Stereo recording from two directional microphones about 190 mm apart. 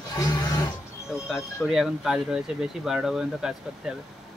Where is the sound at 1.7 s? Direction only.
5° right (ahead or behind).